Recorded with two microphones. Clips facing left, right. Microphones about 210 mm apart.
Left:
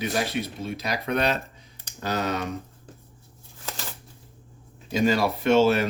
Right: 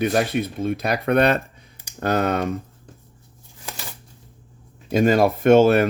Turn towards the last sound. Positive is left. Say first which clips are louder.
# right 6 dB
turn(degrees=-55)  # may be behind; listen again after turning